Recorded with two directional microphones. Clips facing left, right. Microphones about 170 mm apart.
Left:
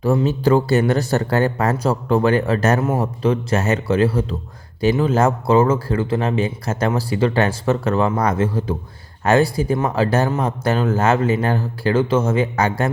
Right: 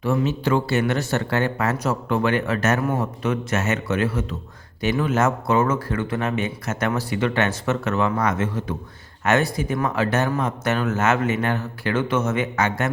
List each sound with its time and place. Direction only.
0.0 s speech: 35° left (ahead or behind)